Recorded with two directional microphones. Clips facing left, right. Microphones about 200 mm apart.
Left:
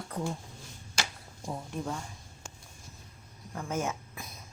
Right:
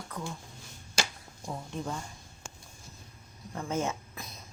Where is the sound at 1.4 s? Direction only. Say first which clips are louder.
Left 1 dB; 5° left (ahead or behind).